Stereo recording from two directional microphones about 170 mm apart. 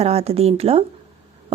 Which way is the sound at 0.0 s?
35° right (ahead or behind).